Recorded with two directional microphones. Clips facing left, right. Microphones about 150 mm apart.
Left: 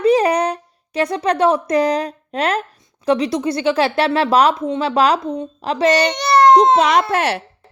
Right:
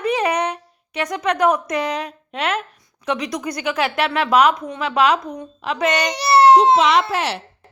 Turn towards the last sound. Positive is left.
turn(degrees=50)  # may be behind; listen again after turning